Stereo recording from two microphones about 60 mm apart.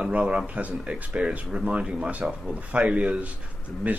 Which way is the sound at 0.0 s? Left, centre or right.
Centre.